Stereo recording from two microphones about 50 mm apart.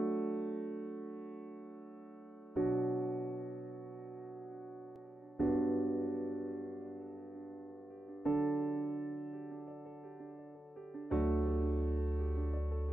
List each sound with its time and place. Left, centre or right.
0.0 s music: centre
2.5 s music: centre
5.4 s music: centre
8.2 s electric piano: centre
11.0 s music: centre
11.5 s music: left
12.0 s music: left